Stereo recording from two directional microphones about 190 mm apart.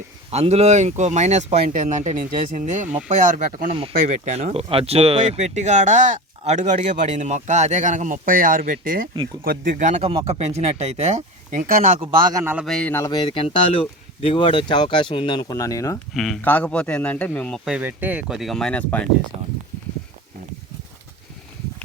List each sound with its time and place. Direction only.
0.3 s speech: 35° right (ahead or behind)
3.7 s speech: 30° right (ahead or behind); by 11.9 s 45° right (ahead or behind)
12.4 s a man's voice: 10° right (ahead or behind)
12.6 s a man's voice: 5° left (ahead or behind)
13.1 s speech: 25° left (ahead or behind)
16.1 s a man's voice: centre (ahead or behind)
17.7 s speech: 10° right (ahead or behind); by 19.0 s 5° left (ahead or behind)